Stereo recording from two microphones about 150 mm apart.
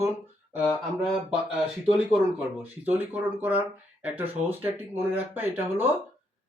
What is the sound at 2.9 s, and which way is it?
Speech, 10° right (ahead or behind).